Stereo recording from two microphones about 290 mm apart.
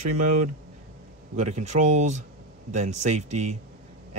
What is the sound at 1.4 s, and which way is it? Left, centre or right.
Speech, right.